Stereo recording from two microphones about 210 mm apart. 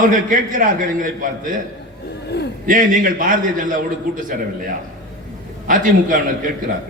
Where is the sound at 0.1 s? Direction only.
40° right (ahead or behind).